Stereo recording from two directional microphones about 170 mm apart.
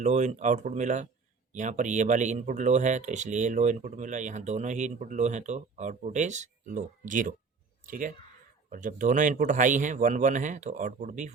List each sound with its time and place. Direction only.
0.0 s speech: 45° right (ahead or behind)